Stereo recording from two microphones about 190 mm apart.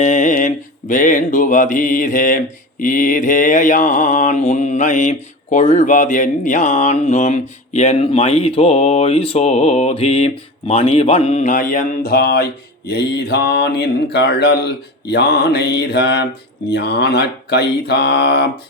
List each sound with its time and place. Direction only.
0.0 s mantra: 40° left (ahead or behind); by 18.4 s 60° left (ahead or behind)